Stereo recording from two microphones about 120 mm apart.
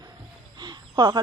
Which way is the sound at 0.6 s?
35° right (ahead or behind).